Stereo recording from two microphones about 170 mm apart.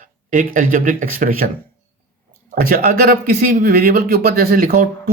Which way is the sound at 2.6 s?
60° right (ahead or behind).